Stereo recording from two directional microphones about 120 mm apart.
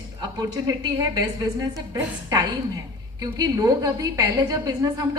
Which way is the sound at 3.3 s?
30° right (ahead or behind).